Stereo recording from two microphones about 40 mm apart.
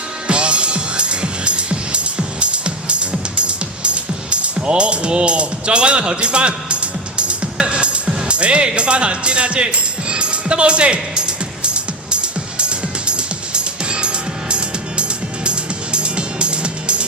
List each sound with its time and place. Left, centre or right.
0.3 s music: right